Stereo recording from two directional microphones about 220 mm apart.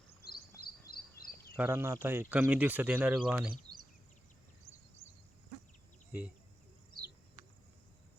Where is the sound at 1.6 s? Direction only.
10° right (ahead or behind).